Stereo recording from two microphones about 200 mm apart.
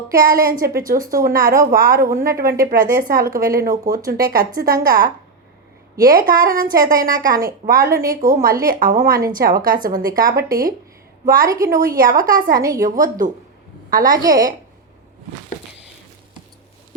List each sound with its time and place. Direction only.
0.1 s a woman's voice: 45° right (ahead or behind)
11.4 s a woman's voice: 15° right (ahead or behind)
11.7 s a woman's voice: 45° right (ahead or behind)
12.5 s a woman's voice: 15° right (ahead or behind)
13.0 s a woman's voice: 40° right (ahead or behind)
14.1 s a woman's voice: 20° right (ahead or behind)